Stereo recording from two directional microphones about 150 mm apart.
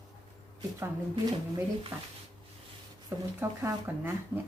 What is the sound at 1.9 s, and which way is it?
Speech, 15° right (ahead or behind).